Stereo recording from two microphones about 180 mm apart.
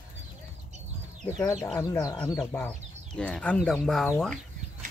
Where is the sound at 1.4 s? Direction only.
15° left (ahead or behind).